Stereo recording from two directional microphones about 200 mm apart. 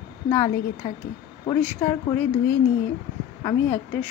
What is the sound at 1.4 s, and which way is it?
Speech, 10° left (ahead or behind).